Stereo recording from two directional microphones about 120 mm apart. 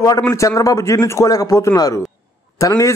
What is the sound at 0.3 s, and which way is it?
A man's voice, 25° left (ahead or behind).